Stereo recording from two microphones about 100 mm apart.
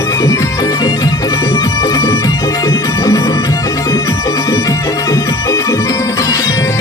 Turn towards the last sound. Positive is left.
turn(degrees=35)  # may be behind; listen again after turning